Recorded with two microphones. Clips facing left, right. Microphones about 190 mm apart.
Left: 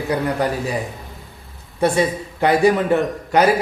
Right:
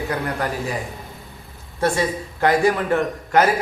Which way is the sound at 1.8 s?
15° left (ahead or behind).